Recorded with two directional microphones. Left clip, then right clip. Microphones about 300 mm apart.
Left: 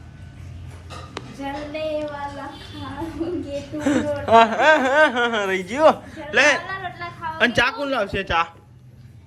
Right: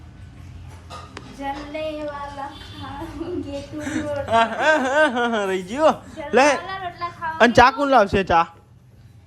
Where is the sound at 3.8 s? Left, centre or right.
Centre.